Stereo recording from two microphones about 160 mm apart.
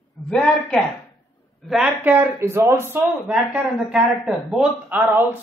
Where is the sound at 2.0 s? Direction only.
10° right (ahead or behind).